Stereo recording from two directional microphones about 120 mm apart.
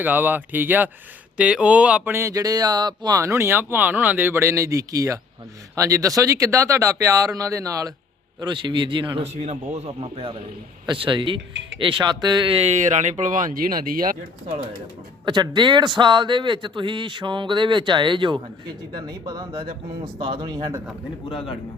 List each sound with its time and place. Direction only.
0.0 s speech: 15° right (ahead or behind)
8.4 s a man's voice: 40° right (ahead or behind)
9.2 s a man's voice: 65° right (ahead or behind); by 12.5 s 35° right (ahead or behind)
12.5 s speech: 70° right (ahead or behind); by 13.5 s 90° right
15.2 s a man's voice: 40° right (ahead or behind)
21.2 s speech: 50° left (ahead or behind)